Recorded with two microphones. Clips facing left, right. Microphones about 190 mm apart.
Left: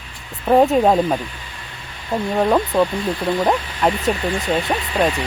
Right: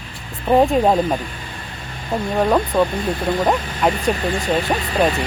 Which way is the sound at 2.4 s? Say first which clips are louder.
Even; centre (ahead or behind).